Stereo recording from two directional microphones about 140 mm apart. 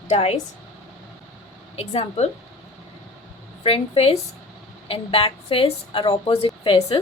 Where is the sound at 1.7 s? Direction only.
45° left (ahead or behind).